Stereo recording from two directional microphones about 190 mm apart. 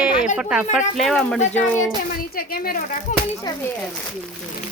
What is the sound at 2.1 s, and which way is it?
Speech, 50° left (ahead or behind).